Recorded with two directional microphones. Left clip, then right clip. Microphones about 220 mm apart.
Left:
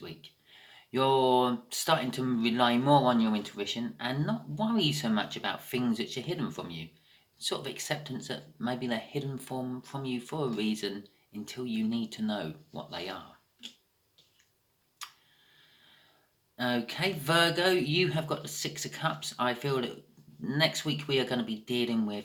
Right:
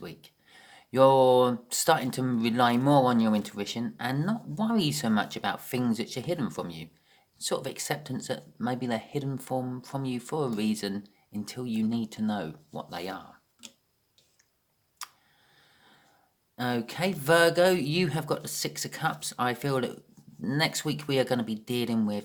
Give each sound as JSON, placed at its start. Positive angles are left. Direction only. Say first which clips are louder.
{"t": 0.0, "sound": "speech", "louder": "right 2 dB", "side_deg": -50}
{"t": 15.0, "sound": "tick", "louder": "right 1 dB", "side_deg": -50}
{"t": 16.6, "sound": "speech", "louder": "right 1 dB", "side_deg": -50}